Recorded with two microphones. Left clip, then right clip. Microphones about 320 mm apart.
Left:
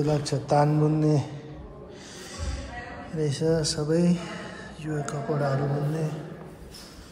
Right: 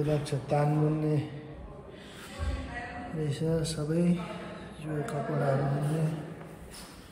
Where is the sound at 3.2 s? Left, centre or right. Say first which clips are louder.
Left 7 dB; centre.